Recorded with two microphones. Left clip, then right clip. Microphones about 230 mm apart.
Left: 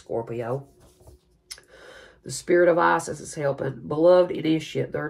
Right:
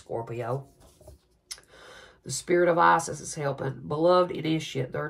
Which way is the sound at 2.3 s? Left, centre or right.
Right.